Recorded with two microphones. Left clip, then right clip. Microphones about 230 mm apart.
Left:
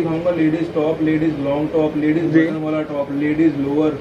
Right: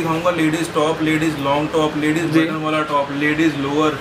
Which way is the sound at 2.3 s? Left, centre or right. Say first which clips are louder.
Even; right.